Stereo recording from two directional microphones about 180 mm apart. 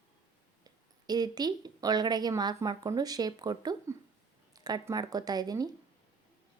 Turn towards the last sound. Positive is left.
turn(degrees=-20)  # may be behind; listen again after turning